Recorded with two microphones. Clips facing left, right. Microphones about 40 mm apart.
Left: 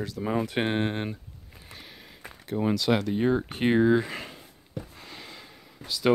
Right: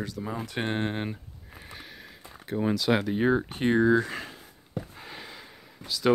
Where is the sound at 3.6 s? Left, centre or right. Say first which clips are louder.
Left 1 dB; centre.